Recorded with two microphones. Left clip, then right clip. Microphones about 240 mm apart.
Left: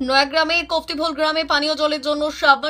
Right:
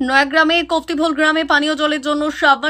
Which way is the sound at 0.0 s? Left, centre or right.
Centre.